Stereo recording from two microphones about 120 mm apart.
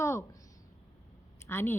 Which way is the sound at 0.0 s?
25° left (ahead or behind).